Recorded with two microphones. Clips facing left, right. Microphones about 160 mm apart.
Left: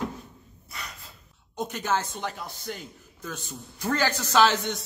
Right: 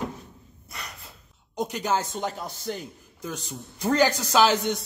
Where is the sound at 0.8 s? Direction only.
Centre (ahead or behind).